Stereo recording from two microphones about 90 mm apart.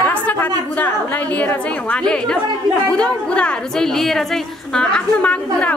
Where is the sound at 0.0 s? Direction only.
15° left (ahead or behind).